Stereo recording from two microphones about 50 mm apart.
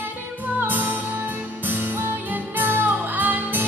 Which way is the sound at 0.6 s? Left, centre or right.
Right.